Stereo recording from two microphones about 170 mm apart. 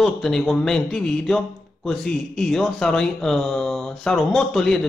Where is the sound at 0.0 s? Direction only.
Centre (ahead or behind).